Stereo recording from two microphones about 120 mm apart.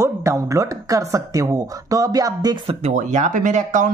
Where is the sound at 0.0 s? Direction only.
25° right (ahead or behind).